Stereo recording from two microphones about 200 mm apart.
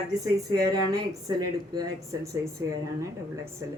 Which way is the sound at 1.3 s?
20° right (ahead or behind).